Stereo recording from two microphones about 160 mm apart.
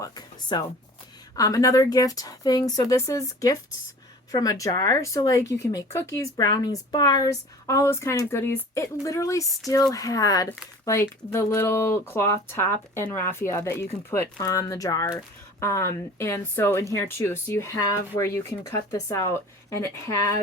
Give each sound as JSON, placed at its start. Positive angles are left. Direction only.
{"t": 0.0, "sound": "a woman's voice", "side_deg": 25}